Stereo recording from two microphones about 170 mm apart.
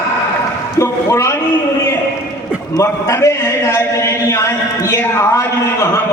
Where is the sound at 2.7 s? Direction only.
15° left (ahead or behind).